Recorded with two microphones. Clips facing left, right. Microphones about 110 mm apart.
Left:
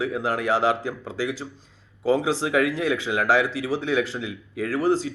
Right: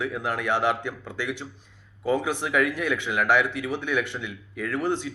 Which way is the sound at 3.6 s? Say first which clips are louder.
Left 3 dB; 25° left (ahead or behind).